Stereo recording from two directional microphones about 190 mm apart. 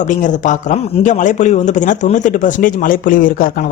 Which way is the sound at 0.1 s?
40° left (ahead or behind).